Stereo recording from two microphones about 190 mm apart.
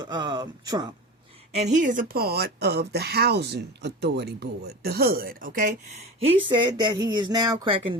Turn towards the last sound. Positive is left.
turn(degrees=-30)  # may be behind; listen again after turning